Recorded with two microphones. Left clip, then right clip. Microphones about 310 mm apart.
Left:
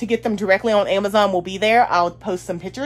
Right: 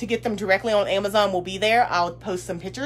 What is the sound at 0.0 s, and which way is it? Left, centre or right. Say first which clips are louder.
Speech: left 4 dB; left.